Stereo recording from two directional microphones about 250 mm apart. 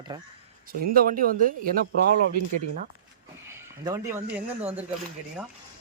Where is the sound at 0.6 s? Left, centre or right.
Right.